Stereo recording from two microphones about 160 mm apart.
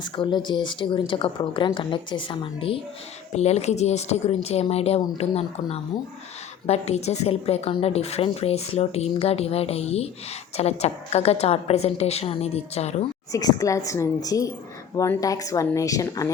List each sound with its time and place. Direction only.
0.0 s a woman's voice: 30° left (ahead or behind)
13.3 s speech: 20° left (ahead or behind)